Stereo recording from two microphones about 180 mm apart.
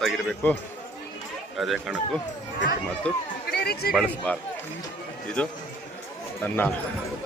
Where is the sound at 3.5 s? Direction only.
65° left (ahead or behind).